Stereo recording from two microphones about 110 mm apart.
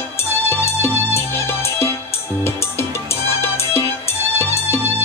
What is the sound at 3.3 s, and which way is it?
Music, 25° left (ahead or behind).